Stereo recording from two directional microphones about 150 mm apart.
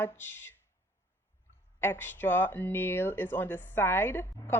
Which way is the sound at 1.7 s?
15° left (ahead or behind).